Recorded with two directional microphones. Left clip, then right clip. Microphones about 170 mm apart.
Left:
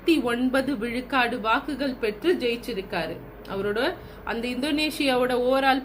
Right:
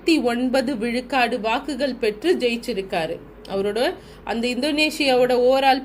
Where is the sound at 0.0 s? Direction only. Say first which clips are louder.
Right 3 dB; 45° right (ahead or behind).